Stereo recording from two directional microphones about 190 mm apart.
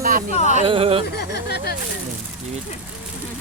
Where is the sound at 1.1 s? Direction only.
60° left (ahead or behind).